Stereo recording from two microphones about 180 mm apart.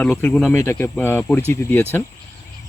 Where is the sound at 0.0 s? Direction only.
10° left (ahead or behind).